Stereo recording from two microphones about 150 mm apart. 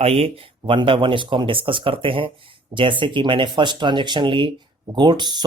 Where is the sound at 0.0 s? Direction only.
40° right (ahead or behind).